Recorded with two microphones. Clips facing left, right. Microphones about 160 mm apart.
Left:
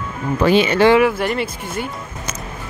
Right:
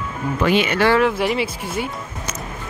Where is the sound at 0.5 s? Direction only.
30° left (ahead or behind).